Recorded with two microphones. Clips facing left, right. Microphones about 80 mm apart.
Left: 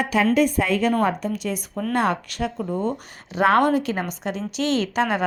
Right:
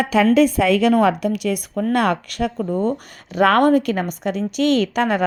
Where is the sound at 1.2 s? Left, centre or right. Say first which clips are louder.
Right 5 dB; right.